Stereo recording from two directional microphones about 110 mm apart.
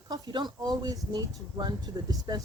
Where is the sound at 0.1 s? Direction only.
40° right (ahead or behind).